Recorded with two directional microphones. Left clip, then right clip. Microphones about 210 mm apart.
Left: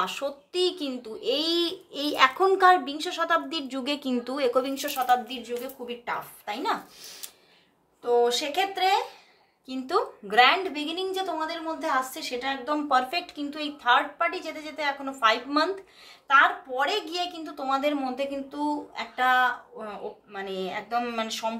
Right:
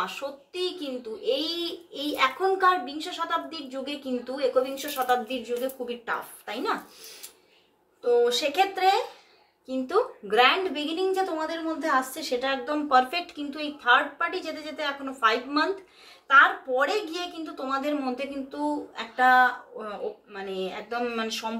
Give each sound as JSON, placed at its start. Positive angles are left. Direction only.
{"t": 0.0, "sound": "a child's voice", "side_deg": 50}
{"t": 8.0, "sound": "a woman's voice", "side_deg": 35}